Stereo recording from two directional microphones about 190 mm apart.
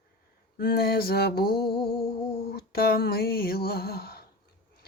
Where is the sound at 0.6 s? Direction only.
55° left (ahead or behind).